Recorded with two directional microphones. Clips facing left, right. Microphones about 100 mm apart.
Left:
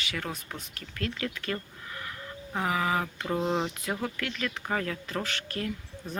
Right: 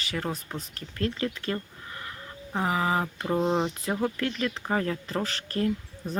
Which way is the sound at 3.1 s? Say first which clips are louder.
Right 3 dB; 15° right (ahead or behind).